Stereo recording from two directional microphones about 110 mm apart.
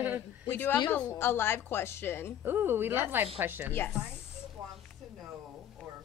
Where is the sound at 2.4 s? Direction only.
20° right (ahead or behind).